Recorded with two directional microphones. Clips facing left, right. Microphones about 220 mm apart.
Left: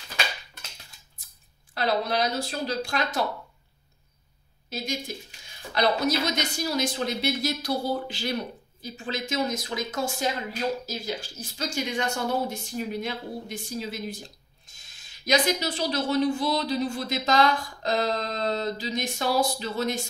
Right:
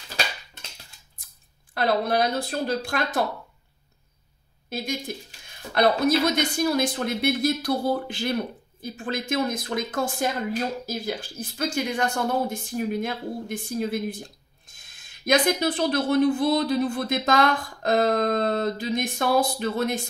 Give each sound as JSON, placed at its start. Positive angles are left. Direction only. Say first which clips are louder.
{"t": 1.7, "sound": "speech", "louder": "right 3 dB", "side_deg": -55}
{"t": 4.6, "sound": "speech", "louder": "right 2 dB", "side_deg": -55}